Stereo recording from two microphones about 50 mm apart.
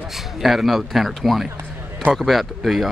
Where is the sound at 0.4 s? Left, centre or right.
Centre.